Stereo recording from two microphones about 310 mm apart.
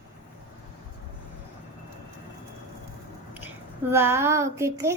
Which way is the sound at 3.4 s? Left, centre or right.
Centre.